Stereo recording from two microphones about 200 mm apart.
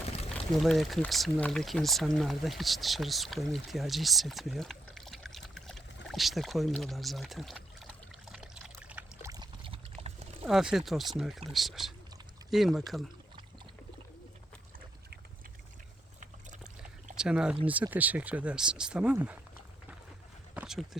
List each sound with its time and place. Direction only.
0.5 s speech: centre (ahead or behind)
8.3 s trickle: 5° right (ahead or behind)
9.3 s a sound: 25° right (ahead or behind)
10.4 s speech: 5° right (ahead or behind)
17.2 s speech: 5° right (ahead or behind)
20.6 s speech: centre (ahead or behind)